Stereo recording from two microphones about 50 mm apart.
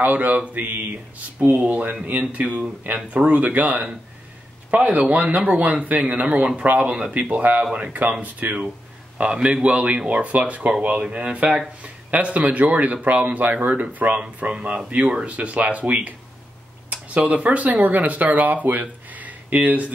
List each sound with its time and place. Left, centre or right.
0.0 s speech: right
9.2 s speech: right